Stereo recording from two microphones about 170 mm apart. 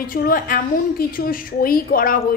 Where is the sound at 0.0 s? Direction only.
55° left (ahead or behind).